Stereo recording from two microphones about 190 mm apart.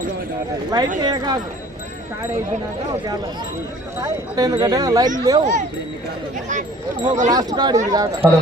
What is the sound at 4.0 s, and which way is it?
Speech, 20° right (ahead or behind).